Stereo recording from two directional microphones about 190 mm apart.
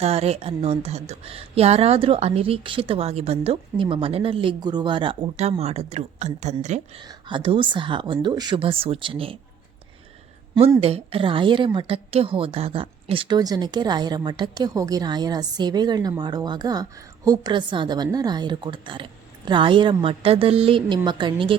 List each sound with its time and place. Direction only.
0.0 s a woman's voice: 35° right (ahead or behind)
7.0 s a woman's voice: 25° right (ahead or behind)
10.5 s a woman's voice: 25° right (ahead or behind)